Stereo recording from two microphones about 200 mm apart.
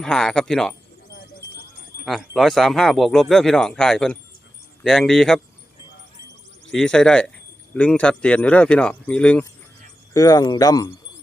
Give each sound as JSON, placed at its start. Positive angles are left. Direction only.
{"t": 0.0, "sound": "speech", "side_deg": 5}
{"t": 2.0, "sound": "speech", "side_deg": 0}
{"t": 6.7, "sound": "speech", "side_deg": 5}
{"t": 10.2, "sound": "speech", "side_deg": 20}